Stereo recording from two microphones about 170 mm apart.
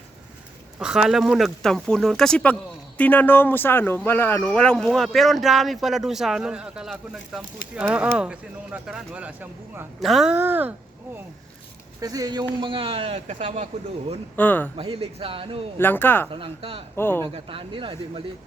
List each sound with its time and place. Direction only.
0.8 s speech: 5° right (ahead or behind)
10.3 s speech: 10° right (ahead or behind)
11.9 s a man's voice: 20° right (ahead or behind); by 13.7 s 40° right (ahead or behind)
14.3 s speech: 10° left (ahead or behind)
14.8 s a man's voice: 30° right (ahead or behind)
15.8 s speech: 10° left (ahead or behind)
16.3 s a man's voice: 30° right (ahead or behind)
16.9 s speech: 15° left (ahead or behind)
17.3 s a man's voice: 30° right (ahead or behind)